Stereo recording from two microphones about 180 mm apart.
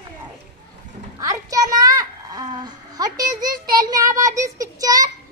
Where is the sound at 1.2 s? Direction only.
20° right (ahead or behind).